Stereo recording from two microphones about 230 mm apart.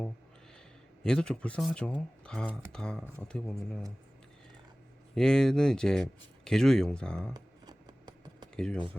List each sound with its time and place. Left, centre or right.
1.0 s speech: centre
5.1 s speech: centre
7.3 s a sound: centre
8.5 s speech: centre